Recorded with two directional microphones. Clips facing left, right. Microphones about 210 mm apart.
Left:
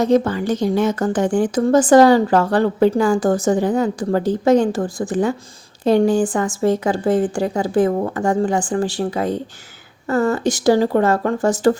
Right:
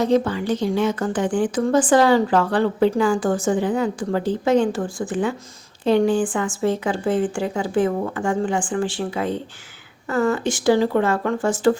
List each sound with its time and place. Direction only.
0.0 s speech: 45° left (ahead or behind)